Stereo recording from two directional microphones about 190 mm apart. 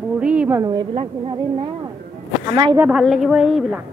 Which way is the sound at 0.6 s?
20° right (ahead or behind).